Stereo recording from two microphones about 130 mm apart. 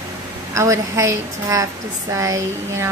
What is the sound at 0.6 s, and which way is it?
Speech, 25° right (ahead or behind).